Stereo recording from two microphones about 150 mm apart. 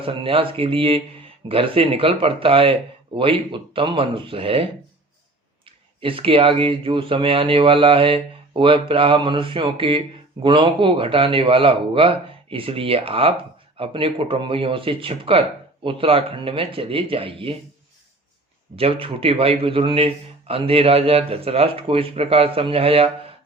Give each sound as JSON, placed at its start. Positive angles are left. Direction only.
{"t": 0.0, "sound": "speech", "side_deg": -35}
{"t": 18.8, "sound": "speech", "side_deg": -35}